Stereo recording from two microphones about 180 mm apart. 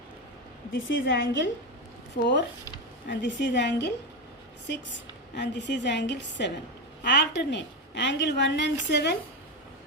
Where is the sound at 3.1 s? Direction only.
80° left.